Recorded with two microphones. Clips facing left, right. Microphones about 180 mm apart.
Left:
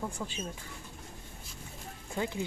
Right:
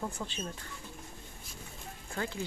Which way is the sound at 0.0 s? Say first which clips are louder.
Left 1 dB; 5° left (ahead or behind).